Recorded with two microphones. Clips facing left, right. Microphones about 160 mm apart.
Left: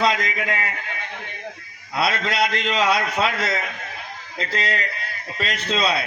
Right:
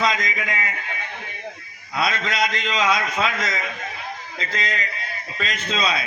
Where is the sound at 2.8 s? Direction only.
60° left (ahead or behind).